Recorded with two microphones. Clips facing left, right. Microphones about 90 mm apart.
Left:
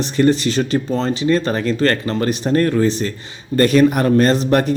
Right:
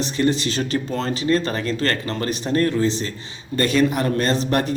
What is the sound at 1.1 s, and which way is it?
Speech, 40° right (ahead or behind).